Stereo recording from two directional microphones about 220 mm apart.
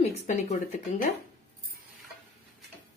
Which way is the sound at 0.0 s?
30° left (ahead or behind).